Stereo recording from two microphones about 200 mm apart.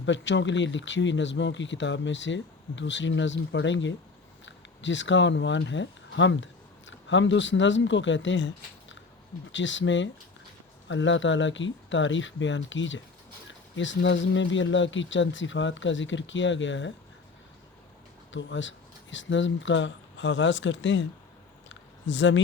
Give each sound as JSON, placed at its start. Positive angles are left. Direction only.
{"t": 0.0, "sound": "speech", "side_deg": 65}
{"t": 18.3, "sound": "speech", "side_deg": 70}
{"t": 21.7, "sound": "a sound", "side_deg": 70}